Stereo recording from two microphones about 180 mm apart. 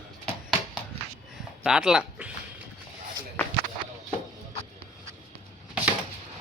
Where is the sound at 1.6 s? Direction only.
5° right (ahead or behind).